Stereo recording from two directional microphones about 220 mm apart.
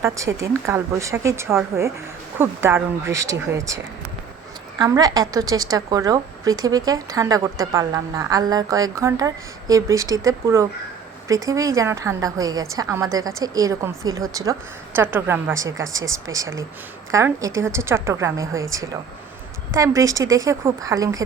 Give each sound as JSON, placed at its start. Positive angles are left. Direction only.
{"t": 0.0, "sound": "a woman's voice", "side_deg": -15}
{"t": 4.8, "sound": "a woman's voice", "side_deg": -15}
{"t": 19.7, "sound": "a woman's voice", "side_deg": -15}